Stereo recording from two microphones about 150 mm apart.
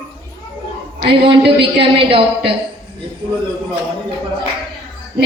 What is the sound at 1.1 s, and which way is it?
A woman's voice, 35° right (ahead or behind).